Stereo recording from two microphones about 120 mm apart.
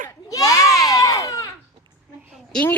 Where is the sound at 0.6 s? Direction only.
5° right (ahead or behind).